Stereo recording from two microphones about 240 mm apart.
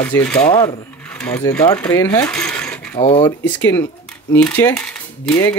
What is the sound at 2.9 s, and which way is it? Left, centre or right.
Speech, centre.